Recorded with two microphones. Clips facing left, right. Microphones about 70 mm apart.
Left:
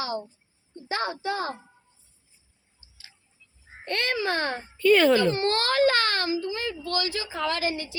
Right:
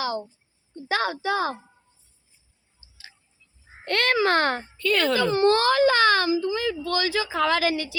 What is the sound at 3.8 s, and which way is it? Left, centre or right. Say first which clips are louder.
Speech: right 5 dB; right.